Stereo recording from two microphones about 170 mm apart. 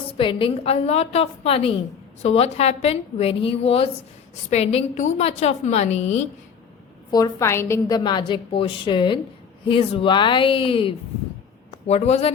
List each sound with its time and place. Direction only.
0.2 s a woman's voice: 30° left (ahead or behind)
7.1 s a woman's voice: 20° left (ahead or behind); by 12.3 s 40° left (ahead or behind)